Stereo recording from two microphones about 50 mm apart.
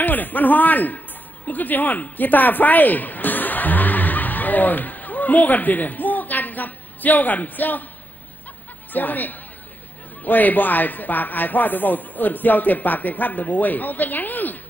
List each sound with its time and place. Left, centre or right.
0.0 s speech: left
8.9 s speech: left